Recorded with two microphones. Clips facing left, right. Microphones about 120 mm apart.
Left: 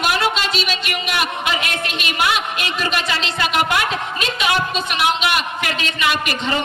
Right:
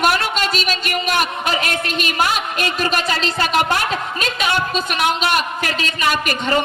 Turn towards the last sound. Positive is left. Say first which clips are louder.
# right 2 dB
turn(degrees=-45)  # may be behind; listen again after turning